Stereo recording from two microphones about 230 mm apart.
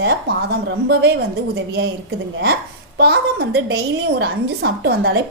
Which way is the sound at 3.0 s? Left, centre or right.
Right.